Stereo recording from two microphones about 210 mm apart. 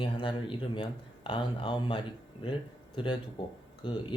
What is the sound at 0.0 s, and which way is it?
Speech, 25° left (ahead or behind).